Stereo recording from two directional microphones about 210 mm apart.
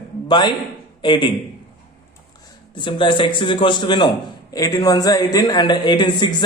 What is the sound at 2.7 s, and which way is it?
Speech, 20° left (ahead or behind).